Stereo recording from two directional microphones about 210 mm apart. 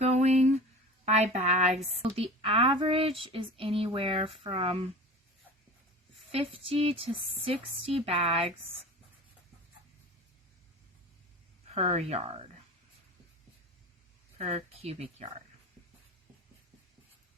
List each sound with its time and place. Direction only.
0.0 s a sound: 30° right (ahead or behind)
1.0 s a woman's voice: 30° right (ahead or behind)
6.3 s speech: 25° right (ahead or behind)
11.7 s speech: 30° right (ahead or behind)
14.3 s a woman's voice: 30° right (ahead or behind)